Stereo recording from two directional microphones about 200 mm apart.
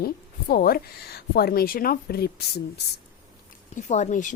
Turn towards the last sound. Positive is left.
turn(degrees=40)  # may be behind; listen again after turning